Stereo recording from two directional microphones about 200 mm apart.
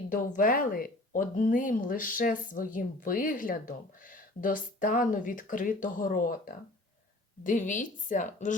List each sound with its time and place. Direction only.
0.1 s a woman's voice: 45° left (ahead or behind)